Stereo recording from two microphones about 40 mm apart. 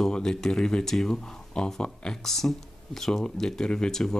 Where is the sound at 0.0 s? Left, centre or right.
Centre.